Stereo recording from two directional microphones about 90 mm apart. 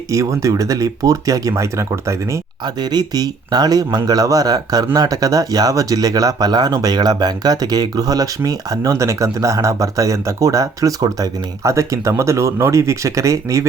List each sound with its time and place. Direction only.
0.1 s speech: 35° right (ahead or behind)
2.6 s speech: 50° right (ahead or behind); by 13.7 s 35° right (ahead or behind)